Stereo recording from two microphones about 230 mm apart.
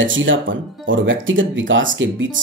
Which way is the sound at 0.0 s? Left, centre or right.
Right.